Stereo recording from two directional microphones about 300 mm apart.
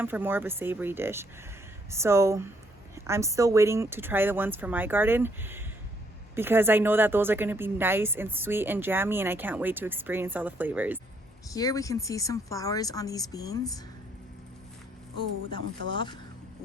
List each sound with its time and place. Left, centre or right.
0.0 s a woman's voice: centre
11.5 s speech: centre
15.9 s speech: centre